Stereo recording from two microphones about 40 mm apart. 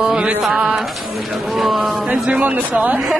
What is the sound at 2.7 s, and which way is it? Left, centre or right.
Speech, right.